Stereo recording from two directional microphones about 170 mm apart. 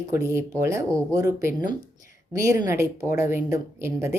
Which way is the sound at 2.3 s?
20° right (ahead or behind).